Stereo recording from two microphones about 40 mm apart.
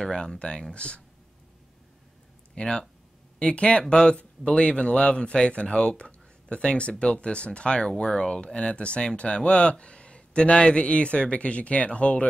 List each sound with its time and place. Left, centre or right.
0.0 s speech: centre
2.5 s speech: left
3.9 s speech: centre